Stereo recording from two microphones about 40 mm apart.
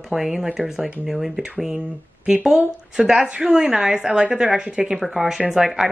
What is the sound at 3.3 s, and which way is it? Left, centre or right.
Speech, right.